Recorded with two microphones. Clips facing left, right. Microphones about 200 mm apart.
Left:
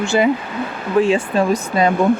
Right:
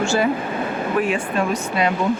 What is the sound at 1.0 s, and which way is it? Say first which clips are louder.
Speech: left 7 dB; 30° left (ahead or behind).